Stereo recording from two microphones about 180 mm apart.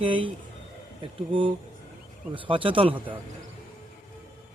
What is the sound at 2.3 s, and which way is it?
Speech, 30° right (ahead or behind).